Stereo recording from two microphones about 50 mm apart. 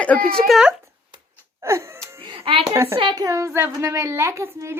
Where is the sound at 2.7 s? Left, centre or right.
Right.